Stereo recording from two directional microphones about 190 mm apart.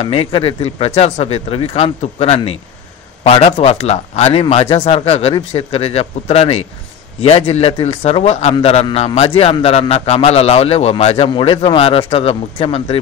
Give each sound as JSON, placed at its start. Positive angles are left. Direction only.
{"t": 0.0, "sound": "a man's voice", "side_deg": 30}